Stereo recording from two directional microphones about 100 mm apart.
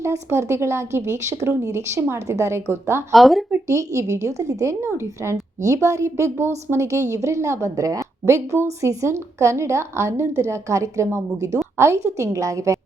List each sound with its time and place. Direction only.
0.0 s speech: 30° right (ahead or behind)
3.1 s speech: centre (ahead or behind)
3.7 s a woman's voice: 30° right (ahead or behind)